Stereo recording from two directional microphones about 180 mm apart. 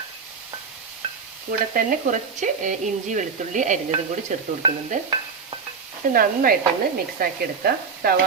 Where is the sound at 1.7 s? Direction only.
45° right (ahead or behind).